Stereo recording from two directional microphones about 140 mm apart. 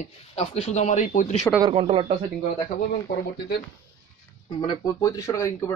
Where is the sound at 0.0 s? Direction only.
45° left (ahead or behind).